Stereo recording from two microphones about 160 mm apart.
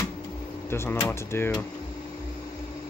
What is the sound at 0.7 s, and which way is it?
Speech, 15° left (ahead or behind).